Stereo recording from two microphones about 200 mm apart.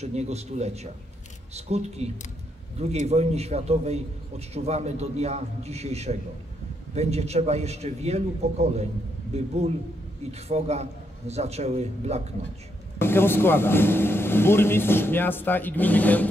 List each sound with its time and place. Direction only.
0.0 s a man's voice: 35° right (ahead or behind)
13.0 s speech: 10° left (ahead or behind)